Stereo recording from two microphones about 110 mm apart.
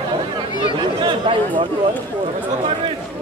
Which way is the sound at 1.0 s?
50° right (ahead or behind).